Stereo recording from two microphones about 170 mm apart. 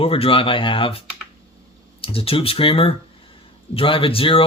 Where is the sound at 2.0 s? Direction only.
35° left (ahead or behind).